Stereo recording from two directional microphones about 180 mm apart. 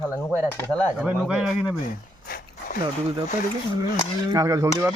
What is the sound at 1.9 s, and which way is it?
Dog, 50° left (ahead or behind).